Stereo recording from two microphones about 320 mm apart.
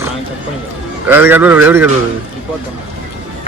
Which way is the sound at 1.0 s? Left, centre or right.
Centre.